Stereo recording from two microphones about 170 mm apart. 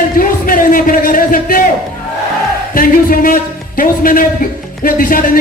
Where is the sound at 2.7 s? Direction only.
55° left (ahead or behind).